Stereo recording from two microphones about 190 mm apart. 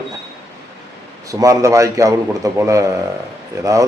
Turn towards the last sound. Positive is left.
turn(degrees=-15)  # may be behind; listen again after turning